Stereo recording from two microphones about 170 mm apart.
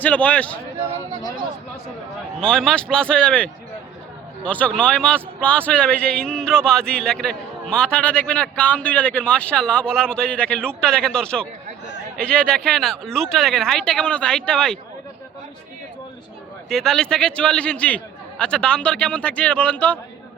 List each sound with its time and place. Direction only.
0.0 s a man's voice: 10° left (ahead or behind)
2.4 s a man's voice: 5° left (ahead or behind)
16.6 s a man's voice: centre (ahead or behind)